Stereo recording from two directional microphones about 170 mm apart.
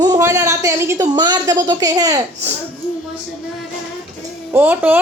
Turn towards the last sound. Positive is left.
turn(degrees=-10)  # may be behind; listen again after turning